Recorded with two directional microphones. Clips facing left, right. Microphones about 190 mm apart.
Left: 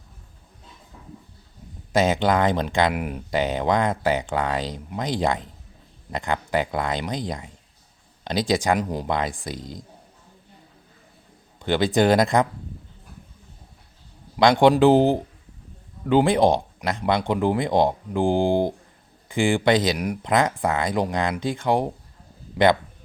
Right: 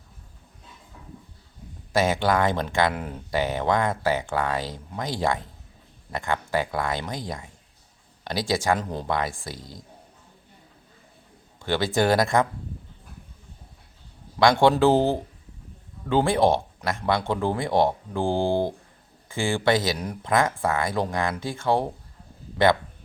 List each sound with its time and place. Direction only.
1.9 s speech: 20° left (ahead or behind)
11.6 s speech: 20° left (ahead or behind)
14.3 s speech: 15° left (ahead or behind)